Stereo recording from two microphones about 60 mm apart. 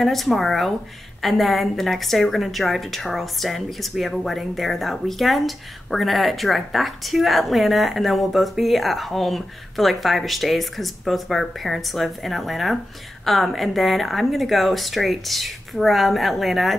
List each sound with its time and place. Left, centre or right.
0.0 s a woman's voice: centre